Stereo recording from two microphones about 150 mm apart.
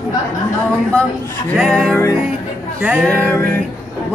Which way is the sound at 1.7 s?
5° left (ahead or behind).